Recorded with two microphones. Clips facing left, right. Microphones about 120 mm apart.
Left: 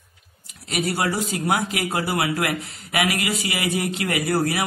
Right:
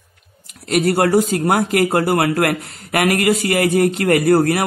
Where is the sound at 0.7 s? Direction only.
55° right (ahead or behind).